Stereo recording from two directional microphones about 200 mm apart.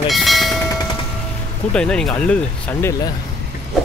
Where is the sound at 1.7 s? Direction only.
5° left (ahead or behind).